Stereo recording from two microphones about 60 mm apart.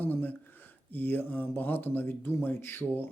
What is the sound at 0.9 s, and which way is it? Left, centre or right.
Speech, left.